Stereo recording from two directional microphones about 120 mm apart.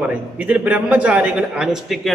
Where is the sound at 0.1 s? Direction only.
10° right (ahead or behind).